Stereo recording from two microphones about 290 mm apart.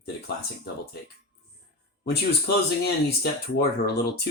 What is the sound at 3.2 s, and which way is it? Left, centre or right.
Speech, left.